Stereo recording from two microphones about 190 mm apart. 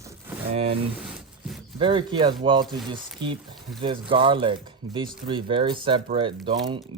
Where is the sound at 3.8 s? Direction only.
25° right (ahead or behind).